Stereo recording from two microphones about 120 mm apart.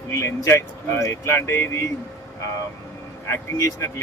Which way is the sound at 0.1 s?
20° left (ahead or behind).